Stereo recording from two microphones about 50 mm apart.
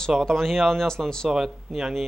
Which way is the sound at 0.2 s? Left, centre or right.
Centre.